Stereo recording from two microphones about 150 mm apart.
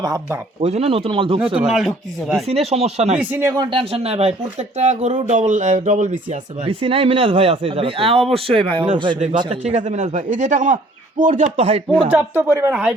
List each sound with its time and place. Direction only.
0.0 s speech: 25° right (ahead or behind)
0.6 s speech: 45° right (ahead or behind)
1.5 s speech: 5° right (ahead or behind)
2.5 s speech: 45° right (ahead or behind)
3.2 s speech: 15° right (ahead or behind)
3.5 s speech: 30° right (ahead or behind); by 6.1 s 50° right (ahead or behind)
6.7 s speech: 40° right (ahead or behind)
9.5 s speech: 50° right (ahead or behind)
12.1 s speech: 15° right (ahead or behind)